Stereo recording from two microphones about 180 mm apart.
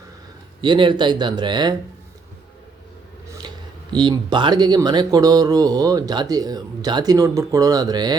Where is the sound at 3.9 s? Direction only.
25° right (ahead or behind).